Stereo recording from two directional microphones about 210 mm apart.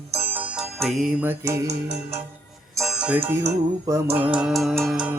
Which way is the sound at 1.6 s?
30° right (ahead or behind).